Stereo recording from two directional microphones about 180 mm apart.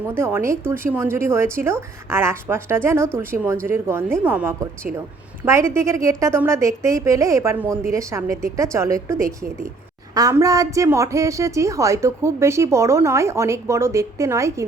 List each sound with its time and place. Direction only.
0.2 s a woman's voice: 15° right (ahead or behind)